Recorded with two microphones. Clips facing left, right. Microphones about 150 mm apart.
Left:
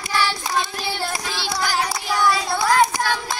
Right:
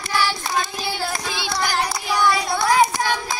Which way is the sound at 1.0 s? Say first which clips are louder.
Even; centre (ahead or behind).